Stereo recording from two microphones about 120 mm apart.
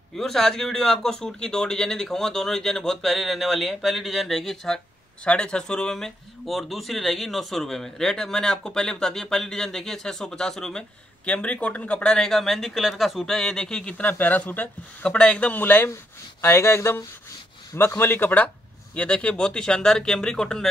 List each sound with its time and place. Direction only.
0.2 s speech: 5° left (ahead or behind)